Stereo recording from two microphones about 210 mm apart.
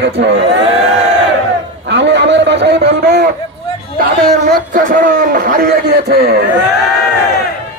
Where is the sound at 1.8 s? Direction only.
55° right (ahead or behind).